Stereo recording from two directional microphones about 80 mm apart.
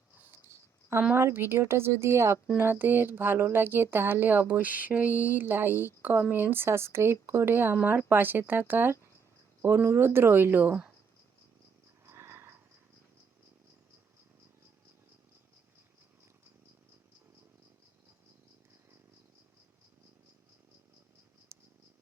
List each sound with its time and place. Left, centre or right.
1.1 s speech: right
12.0 s a sound: right
21.5 s purr: right